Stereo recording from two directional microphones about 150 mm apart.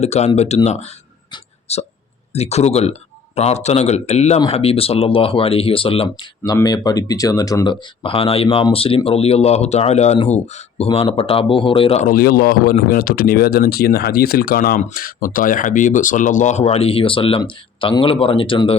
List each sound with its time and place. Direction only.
0.0 s speech: 45° left (ahead or behind)
6.4 s speech: 25° left (ahead or behind)
12.0 s a man's voice: 80° left; by 18.8 s 35° left (ahead or behind)